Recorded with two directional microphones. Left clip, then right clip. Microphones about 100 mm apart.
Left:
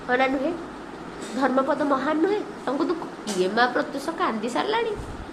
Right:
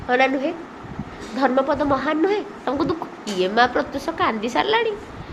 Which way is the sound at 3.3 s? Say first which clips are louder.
Right 4 dB; 70° right (ahead or behind).